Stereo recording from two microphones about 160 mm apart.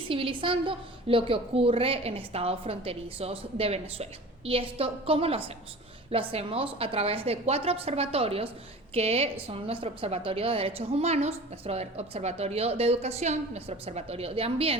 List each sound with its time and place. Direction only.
0.1 s a woman's voice: 35° right (ahead or behind)